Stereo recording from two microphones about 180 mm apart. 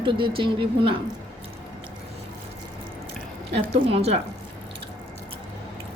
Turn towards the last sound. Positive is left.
turn(degrees=-35)  # may be behind; listen again after turning